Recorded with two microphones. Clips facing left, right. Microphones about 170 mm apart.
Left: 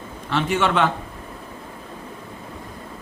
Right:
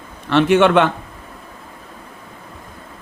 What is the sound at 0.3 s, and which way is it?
Speech, 70° right (ahead or behind).